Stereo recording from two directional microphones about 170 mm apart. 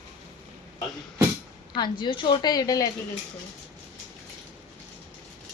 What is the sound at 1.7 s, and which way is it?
A woman's voice, 25° left (ahead or behind).